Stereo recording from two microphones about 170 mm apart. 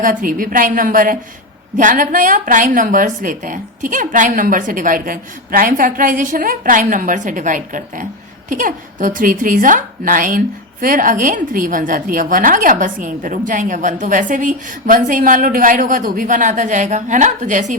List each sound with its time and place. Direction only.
0.0 s speech: 50° right (ahead or behind)